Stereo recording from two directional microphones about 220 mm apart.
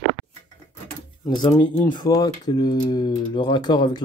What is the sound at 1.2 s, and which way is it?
Speech, 20° left (ahead or behind).